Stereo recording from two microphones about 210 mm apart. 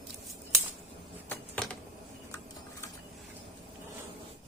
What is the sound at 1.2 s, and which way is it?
Typing, 5° left (ahead or behind).